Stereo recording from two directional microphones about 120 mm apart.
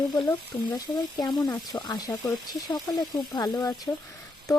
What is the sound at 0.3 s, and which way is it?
Speech, 35° left (ahead or behind).